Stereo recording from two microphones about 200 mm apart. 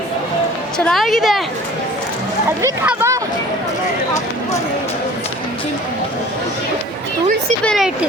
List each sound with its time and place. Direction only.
0.9 s a woman's voice: centre (ahead or behind)
2.6 s speech: 15° right (ahead or behind)
7.6 s a woman's voice: centre (ahead or behind)